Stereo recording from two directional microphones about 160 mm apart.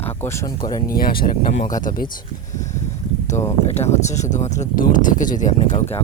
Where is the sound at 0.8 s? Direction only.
65° left (ahead or behind).